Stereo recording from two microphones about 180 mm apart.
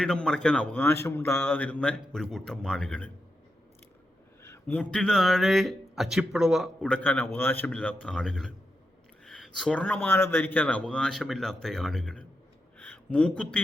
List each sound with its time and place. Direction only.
0.0 s speech: 5° left (ahead or behind)
4.4 s speech: 10° left (ahead or behind)